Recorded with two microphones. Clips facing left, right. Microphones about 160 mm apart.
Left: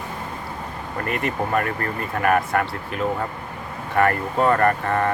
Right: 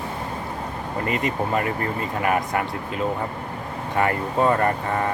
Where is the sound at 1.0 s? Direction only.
20° right (ahead or behind).